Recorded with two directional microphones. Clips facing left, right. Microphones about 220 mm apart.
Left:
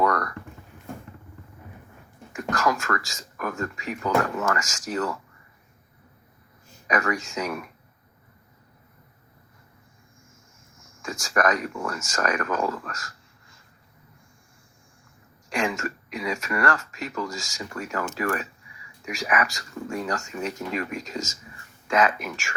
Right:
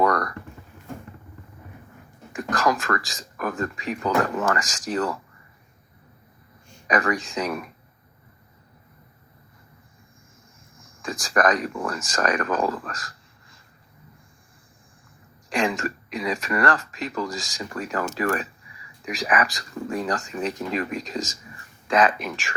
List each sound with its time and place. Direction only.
0.0 s a sound: 35° right (ahead or behind)
2.3 s speech: 35° right (ahead or behind)
6.8 s speech: 35° right (ahead or behind)
10.8 s speech: 35° right (ahead or behind)
15.4 s speech: 35° right (ahead or behind)